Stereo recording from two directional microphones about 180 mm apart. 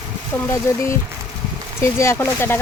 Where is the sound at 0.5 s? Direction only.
15° left (ahead or behind).